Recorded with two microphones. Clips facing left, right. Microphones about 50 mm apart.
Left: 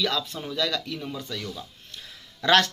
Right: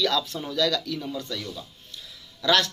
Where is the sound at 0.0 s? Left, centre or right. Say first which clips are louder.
Right 2 dB; left.